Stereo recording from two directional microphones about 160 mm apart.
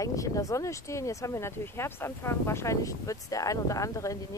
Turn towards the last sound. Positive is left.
turn(degrees=20)  # may be behind; listen again after turning